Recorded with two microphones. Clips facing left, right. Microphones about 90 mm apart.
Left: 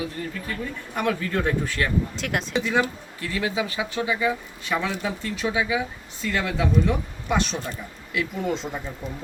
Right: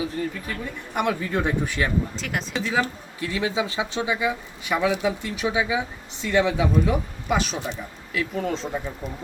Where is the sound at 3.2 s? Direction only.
20° right (ahead or behind).